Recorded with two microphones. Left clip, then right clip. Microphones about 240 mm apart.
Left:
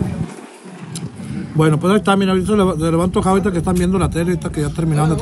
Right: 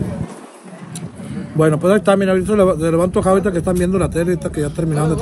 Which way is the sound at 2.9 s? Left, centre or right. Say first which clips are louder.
Right 2 dB; left.